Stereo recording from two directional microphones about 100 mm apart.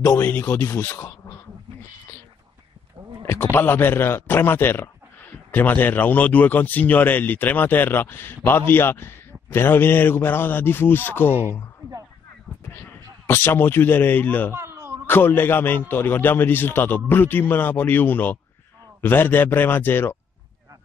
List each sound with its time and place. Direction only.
0.2 s a man's voice: 15° left (ahead or behind)
3.5 s a man's voice: 20° left (ahead or behind)
12.5 s a sound: 5° left (ahead or behind)
13.3 s a man's voice: 20° left (ahead or behind)
14.5 s a sound: 25° right (ahead or behind)
15.0 s a man's voice: 20° left (ahead or behind)